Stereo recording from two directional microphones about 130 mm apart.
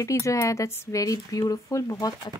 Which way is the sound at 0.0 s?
25° left (ahead or behind).